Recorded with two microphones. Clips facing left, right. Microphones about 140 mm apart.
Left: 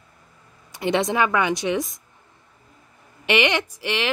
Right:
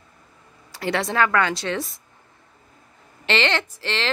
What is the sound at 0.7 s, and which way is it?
Speech, 20° left (ahead or behind).